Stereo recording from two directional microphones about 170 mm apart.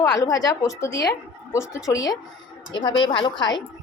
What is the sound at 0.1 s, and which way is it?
A woman's voice, 20° left (ahead or behind).